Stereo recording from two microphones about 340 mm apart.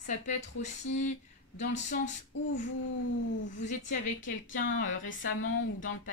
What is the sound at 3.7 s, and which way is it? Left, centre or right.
Speech, left.